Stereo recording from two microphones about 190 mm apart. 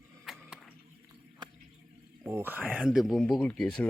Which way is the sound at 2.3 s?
10° right (ahead or behind).